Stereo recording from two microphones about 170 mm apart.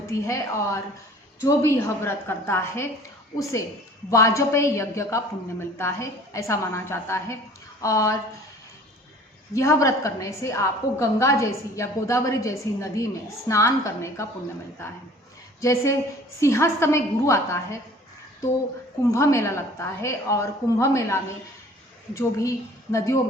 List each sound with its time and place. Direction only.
0.1 s a woman's voice: 15° left (ahead or behind)
9.6 s a woman's voice: 15° left (ahead or behind)
15.6 s a woman's voice: 20° left (ahead or behind)
19.1 s a woman's voice: 15° left (ahead or behind)